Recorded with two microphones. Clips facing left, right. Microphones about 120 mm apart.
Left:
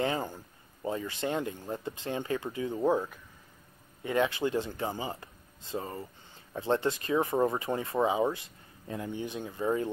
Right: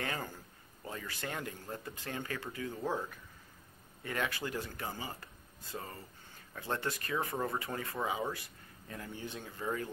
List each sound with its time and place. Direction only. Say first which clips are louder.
0.0 s speech: left 8 dB; 20° left (ahead or behind)